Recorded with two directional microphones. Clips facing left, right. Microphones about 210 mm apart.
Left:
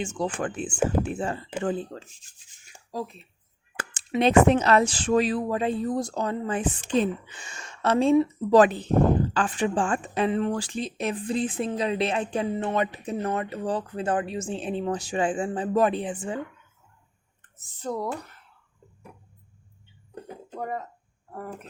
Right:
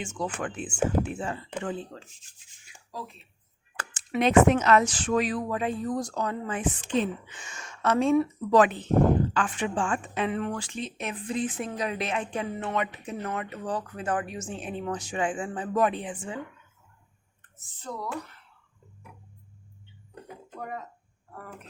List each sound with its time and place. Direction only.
0.0 s a woman's voice: 35° left (ahead or behind)
1.9 s rub: 40° left (ahead or behind)
2.6 s a sound: 40° left (ahead or behind)
4.2 s a woman's voice: 30° left (ahead or behind)
17.8 s speech: 45° left (ahead or behind)
20.2 s music: 40° left (ahead or behind)